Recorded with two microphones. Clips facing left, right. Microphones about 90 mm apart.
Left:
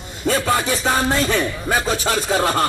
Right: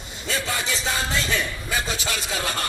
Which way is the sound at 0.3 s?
50° left (ahead or behind).